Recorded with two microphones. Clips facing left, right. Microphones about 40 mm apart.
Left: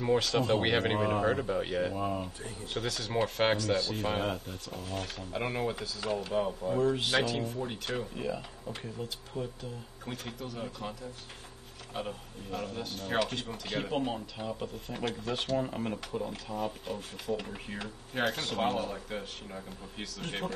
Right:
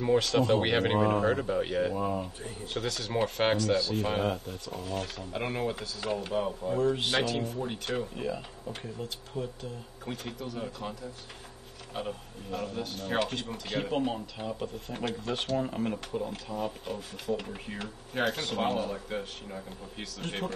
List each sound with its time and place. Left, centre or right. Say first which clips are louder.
0.0 s speech: right 2 dB; centre
7.0 s speech: even; centre
7.2 s speech: right 2 dB; centre
9.3 s speech: right 1 dB; right
10.0 s speech: right 2 dB; centre